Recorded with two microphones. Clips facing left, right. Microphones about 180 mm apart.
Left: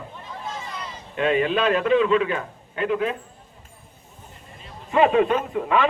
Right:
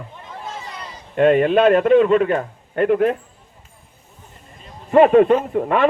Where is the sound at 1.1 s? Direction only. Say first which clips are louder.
Right 7 dB; 50° right (ahead or behind).